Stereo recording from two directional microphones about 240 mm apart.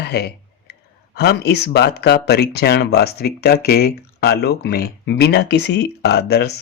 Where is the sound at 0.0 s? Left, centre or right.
Left.